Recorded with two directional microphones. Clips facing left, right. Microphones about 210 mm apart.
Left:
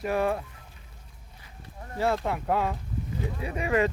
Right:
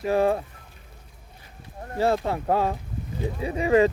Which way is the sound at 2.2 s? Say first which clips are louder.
Right 3 dB; 35° right (ahead or behind).